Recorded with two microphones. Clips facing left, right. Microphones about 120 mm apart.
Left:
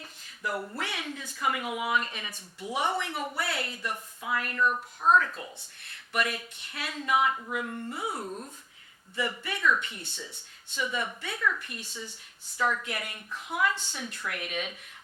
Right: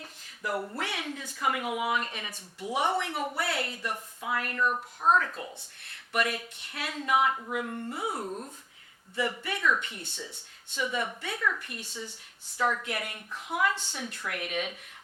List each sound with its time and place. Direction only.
0.0 s a sound: 45° right (ahead or behind)
0.8 s speech: 50° right (ahead or behind)
4.6 s speech: 30° right (ahead or behind)
6.1 s speech: 50° right (ahead or behind)
8.2 s speech: 25° right (ahead or behind)
9.1 s speech: 45° right (ahead or behind)
11.7 s a woman's voice: 60° right (ahead or behind)
12.5 s speech: 40° right (ahead or behind)
13.7 s speech: 65° right (ahead or behind)
14.0 s speech: 45° right (ahead or behind)